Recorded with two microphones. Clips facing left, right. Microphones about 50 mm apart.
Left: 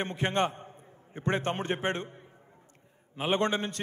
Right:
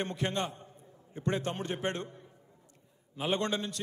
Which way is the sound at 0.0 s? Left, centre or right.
Left.